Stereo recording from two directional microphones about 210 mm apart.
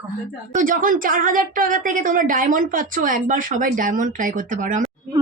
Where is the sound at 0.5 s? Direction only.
40° right (ahead or behind).